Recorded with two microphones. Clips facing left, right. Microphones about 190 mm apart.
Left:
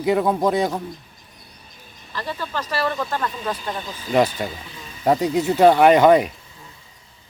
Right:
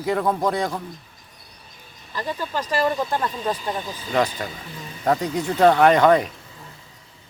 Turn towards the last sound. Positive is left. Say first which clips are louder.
# left 2 dB
turn(degrees=10)  # may be behind; listen again after turning